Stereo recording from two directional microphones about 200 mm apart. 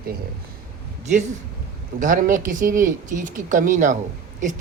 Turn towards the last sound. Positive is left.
turn(degrees=-40)  # may be behind; listen again after turning